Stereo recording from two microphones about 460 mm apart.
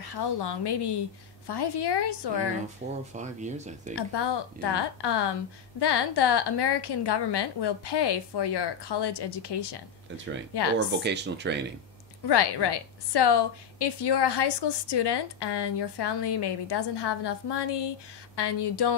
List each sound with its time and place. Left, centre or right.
0.0 s a woman's voice: left
3.2 s speech: centre
3.9 s a woman's voice: left
11.0 s speech: right
12.3 s a woman's voice: left